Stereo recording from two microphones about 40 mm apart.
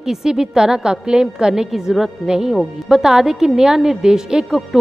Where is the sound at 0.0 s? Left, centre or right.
Centre.